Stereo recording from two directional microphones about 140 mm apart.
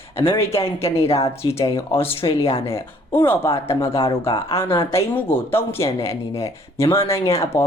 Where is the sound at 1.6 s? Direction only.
20° left (ahead or behind).